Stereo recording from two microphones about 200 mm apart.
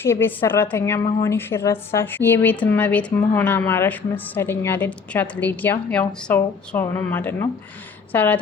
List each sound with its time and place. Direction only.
0.0 s a woman's voice: 10° left (ahead or behind)